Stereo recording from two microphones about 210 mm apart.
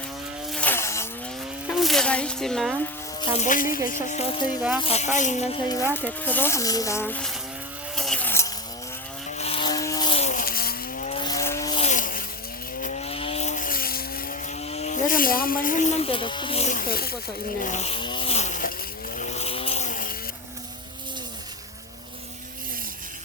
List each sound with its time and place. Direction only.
0.5 s a sound: 10° left (ahead or behind)
1.6 s a sound: centre (ahead or behind)
3.2 s speech: 35° left (ahead or behind)
5.9 s speech: 10° left (ahead or behind)
7.9 s a sound: centre (ahead or behind)
9.4 s vehicle: 25° left (ahead or behind)
10.4 s vehicle: 45° left (ahead or behind)
11.1 s vehicle: 20° left (ahead or behind)
11.8 s vehicle: 35° left (ahead or behind)
17.6 s speech: 35° left (ahead or behind)
19.1 s vehicle: 35° left (ahead or behind)